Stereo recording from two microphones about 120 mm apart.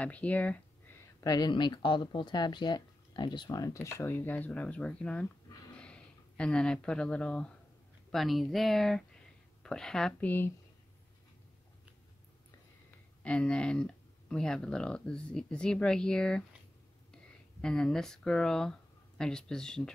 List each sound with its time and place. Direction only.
0.0 s speech: 10° left (ahead or behind)
1.2 s speech: 35° left (ahead or behind); by 10.3 s 5° left (ahead or behind)
13.2 s speech: 10° left (ahead or behind)